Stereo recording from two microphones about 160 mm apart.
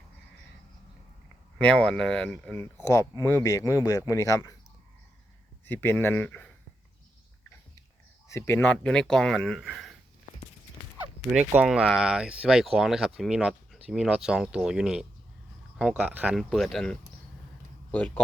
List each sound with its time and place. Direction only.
1.5 s speech: 5° left (ahead or behind)
5.6 s speech: 10° left (ahead or behind)
8.3 s speech: 15° left (ahead or behind); by 10.0 s centre (ahead or behind)
11.3 s speech: 5° right (ahead or behind)